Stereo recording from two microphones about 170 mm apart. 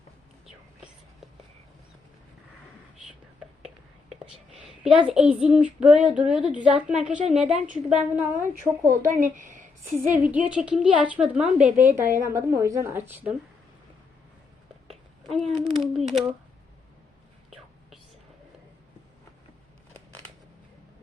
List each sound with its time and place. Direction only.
4.1 s a child's voice: centre (ahead or behind)
9.0 s a woman's voice: 50° right (ahead or behind)
10.1 s a woman's voice: 10° right (ahead or behind)
14.8 s a sound: centre (ahead or behind)